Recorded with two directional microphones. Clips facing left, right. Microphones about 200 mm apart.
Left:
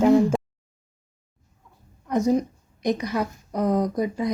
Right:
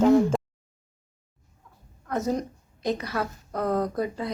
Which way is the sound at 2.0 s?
15° left (ahead or behind).